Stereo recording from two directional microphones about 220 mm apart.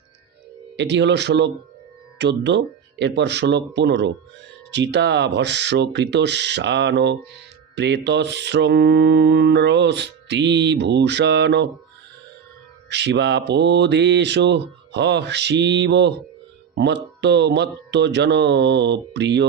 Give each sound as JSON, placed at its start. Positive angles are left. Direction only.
{"t": 0.8, "sound": "mantra", "side_deg": -55}
{"t": 2.1, "sound": "speech", "side_deg": -50}
{"t": 3.0, "sound": "mantra", "side_deg": -50}
{"t": 12.9, "sound": "mantra", "side_deg": -50}